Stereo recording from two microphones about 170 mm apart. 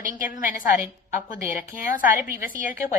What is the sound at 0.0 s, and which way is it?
Speech, 50° left (ahead or behind).